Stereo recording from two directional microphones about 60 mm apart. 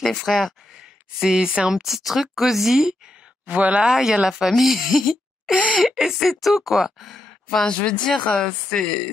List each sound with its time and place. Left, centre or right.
0.0 s speech: centre
1.2 s speech: centre
3.4 s speech: right
3.9 s speech: centre
7.6 s speech: centre